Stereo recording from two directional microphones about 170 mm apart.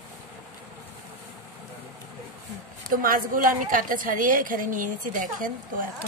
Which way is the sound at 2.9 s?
55° right (ahead or behind).